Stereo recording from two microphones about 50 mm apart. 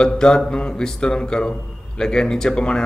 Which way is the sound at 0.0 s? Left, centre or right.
Centre.